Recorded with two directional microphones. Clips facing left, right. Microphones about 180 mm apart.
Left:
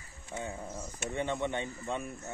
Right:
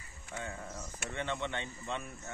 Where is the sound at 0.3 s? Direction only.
15° left (ahead or behind).